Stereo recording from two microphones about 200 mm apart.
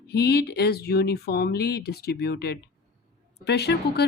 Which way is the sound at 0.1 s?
55° left (ahead or behind).